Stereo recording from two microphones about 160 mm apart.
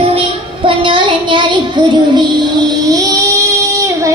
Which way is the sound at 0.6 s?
30° right (ahead or behind).